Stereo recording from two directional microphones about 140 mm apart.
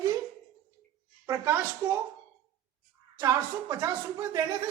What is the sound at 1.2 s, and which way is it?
Speech, 20° right (ahead or behind).